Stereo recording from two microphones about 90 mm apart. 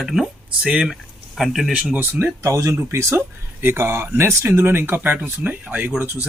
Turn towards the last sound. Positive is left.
turn(degrees=-20)  # may be behind; listen again after turning